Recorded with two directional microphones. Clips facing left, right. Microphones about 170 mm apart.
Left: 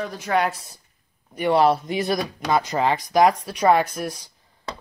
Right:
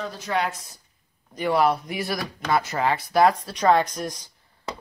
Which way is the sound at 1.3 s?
15° left (ahead or behind).